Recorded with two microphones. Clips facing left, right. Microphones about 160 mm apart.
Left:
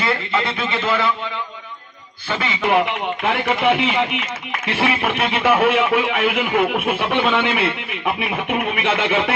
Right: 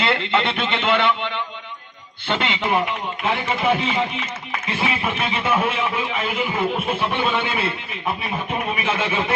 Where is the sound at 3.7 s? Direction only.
70° left (ahead or behind).